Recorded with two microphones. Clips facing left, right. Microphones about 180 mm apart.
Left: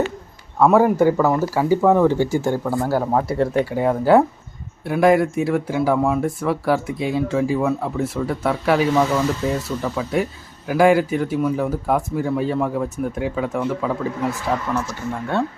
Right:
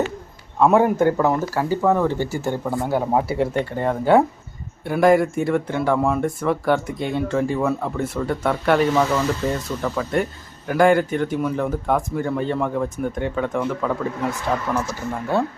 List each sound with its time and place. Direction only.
0.7 s speech: centre (ahead or behind)
1.7 s speech: 15° left (ahead or behind)
2.6 s speech: centre (ahead or behind)
3.1 s speech: 10° right (ahead or behind)